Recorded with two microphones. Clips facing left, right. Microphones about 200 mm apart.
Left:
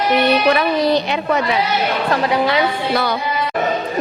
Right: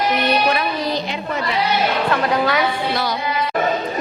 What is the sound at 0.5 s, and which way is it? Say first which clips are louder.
Speech: left 6 dB; 70° left (ahead or behind).